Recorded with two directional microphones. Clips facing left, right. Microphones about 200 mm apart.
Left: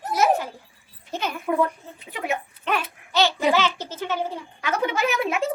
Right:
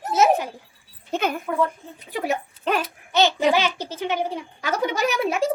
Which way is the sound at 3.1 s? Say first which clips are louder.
Right 2 dB; 15° right (ahead or behind).